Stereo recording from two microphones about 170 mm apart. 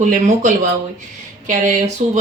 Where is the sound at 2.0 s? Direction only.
50° right (ahead or behind).